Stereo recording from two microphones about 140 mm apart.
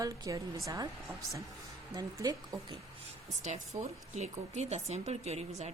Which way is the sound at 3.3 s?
60° right (ahead or behind).